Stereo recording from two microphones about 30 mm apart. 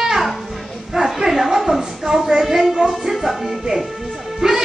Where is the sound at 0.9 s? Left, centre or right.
Centre.